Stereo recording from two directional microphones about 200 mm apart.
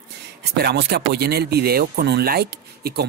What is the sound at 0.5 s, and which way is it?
Speech, 55° right (ahead or behind).